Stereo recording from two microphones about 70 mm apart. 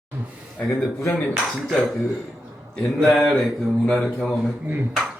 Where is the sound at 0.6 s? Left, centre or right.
Centre.